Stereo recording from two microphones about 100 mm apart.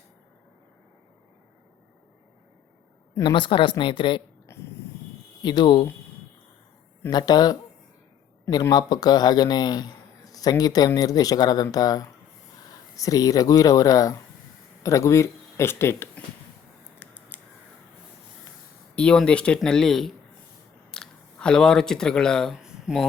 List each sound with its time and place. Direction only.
3.2 s a woman's voice: 55° left (ahead or behind)
4.5 s a sound: 25° left (ahead or behind)
5.4 s speech: 45° left (ahead or behind)
7.1 s speech: 45° left (ahead or behind)
8.7 s a man's voice: 45° left (ahead or behind); by 16.2 s 25° left (ahead or behind)
17.0 s scissors: 20° left (ahead or behind)
18.9 s speech: 10° left (ahead or behind)
22.5 s a sound: 5° right (ahead or behind)